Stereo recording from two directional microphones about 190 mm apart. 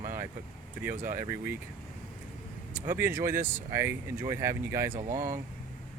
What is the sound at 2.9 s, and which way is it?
Speech, 10° right (ahead or behind).